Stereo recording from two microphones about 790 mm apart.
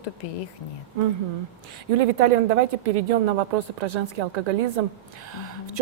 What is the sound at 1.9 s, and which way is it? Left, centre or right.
A woman's voice, right.